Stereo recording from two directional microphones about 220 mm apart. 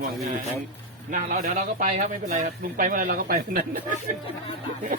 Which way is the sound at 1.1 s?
35° right (ahead or behind).